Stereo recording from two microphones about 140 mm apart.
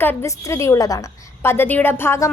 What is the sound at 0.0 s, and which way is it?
A woman's voice, 15° left (ahead or behind).